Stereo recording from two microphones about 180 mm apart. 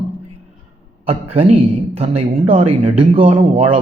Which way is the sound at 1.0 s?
35° right (ahead or behind).